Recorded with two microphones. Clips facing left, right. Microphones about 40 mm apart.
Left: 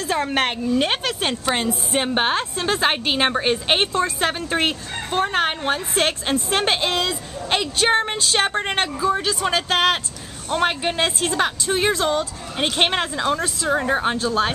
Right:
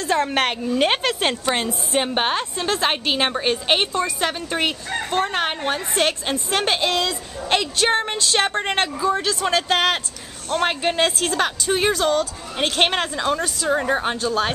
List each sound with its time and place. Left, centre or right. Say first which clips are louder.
0.0 s a woman's voice: right 1 dB; centre
5.7 s a woman's voice: even; centre
11.9 s a woman's voice: right 1 dB; centre